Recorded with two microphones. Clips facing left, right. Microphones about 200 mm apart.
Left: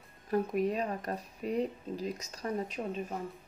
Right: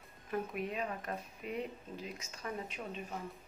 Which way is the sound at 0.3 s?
40° left (ahead or behind).